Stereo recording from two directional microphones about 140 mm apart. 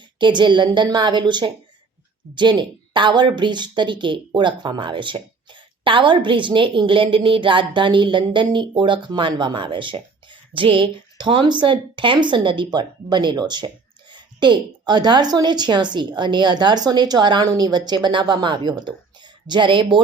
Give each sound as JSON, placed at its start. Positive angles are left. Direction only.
{"t": 0.2, "sound": "a woman's voice", "side_deg": -35}